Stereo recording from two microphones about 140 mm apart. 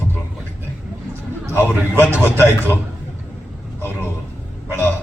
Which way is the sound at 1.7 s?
15° right (ahead or behind).